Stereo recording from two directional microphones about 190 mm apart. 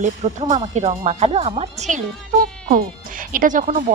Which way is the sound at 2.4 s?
50° right (ahead or behind).